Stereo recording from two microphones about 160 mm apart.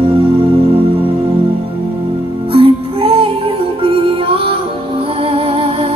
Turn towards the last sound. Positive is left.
turn(degrees=-35)  # may be behind; listen again after turning